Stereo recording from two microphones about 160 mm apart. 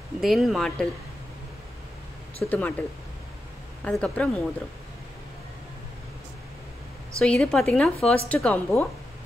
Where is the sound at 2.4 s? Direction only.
5° left (ahead or behind).